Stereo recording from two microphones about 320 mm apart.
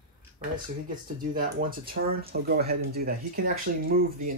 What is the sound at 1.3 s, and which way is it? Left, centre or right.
Speech, right.